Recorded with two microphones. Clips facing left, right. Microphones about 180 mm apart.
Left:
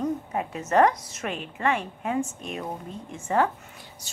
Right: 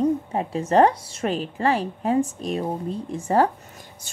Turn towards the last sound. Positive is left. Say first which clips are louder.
# right 2 dB
turn(degrees=-50)  # may be behind; listen again after turning